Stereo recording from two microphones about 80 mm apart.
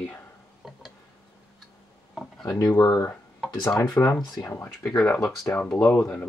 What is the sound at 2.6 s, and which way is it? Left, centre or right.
Speech, left.